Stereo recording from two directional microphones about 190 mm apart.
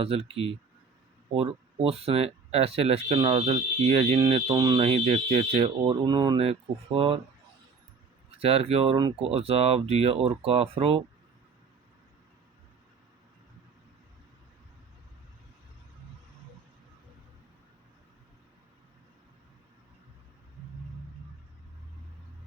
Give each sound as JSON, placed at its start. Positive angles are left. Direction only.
{"t": 0.0, "sound": "speech", "side_deg": -30}
{"t": 8.4, "sound": "speech", "side_deg": -30}